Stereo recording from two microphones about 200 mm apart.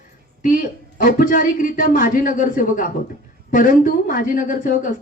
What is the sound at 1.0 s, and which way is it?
Speech, 40° left (ahead or behind).